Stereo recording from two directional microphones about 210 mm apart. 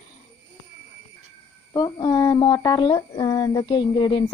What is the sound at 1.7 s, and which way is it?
A woman's voice, 20° left (ahead or behind).